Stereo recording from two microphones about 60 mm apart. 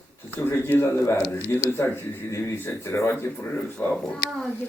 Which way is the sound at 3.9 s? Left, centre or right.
Centre.